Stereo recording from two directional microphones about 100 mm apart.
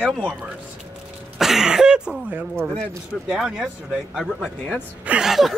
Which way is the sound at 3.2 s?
5° right (ahead or behind).